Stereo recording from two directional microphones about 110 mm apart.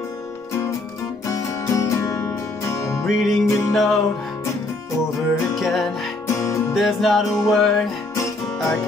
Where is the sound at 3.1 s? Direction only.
Centre (ahead or behind).